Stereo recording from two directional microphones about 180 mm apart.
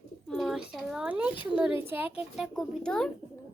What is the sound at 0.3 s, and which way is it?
A woman's voice, centre (ahead or behind).